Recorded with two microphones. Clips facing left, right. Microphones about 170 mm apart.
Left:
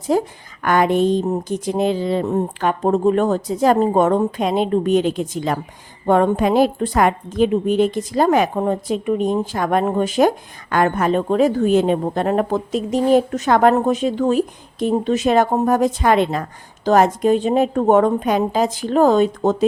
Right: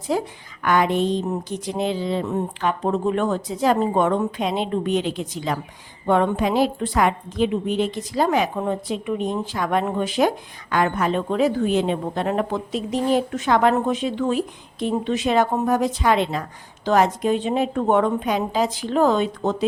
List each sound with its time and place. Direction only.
0.1 s a woman's voice: 45° left (ahead or behind)